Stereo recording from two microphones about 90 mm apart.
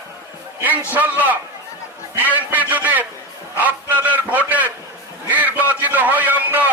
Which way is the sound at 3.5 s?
20° right (ahead or behind).